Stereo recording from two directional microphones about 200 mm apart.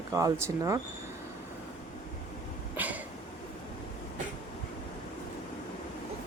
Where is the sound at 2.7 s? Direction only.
10° right (ahead or behind).